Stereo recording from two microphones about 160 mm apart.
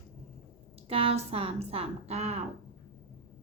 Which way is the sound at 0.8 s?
35° right (ahead or behind).